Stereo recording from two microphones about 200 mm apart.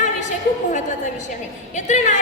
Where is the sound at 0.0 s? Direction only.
40° left (ahead or behind).